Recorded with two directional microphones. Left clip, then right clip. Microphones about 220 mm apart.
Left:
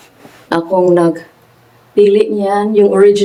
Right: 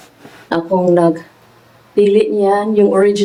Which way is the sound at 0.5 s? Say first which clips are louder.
Left 2 dB; 10° left (ahead or behind).